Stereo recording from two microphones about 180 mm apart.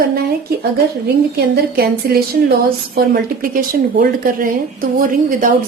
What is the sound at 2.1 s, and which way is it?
Speech, 55° right (ahead or behind).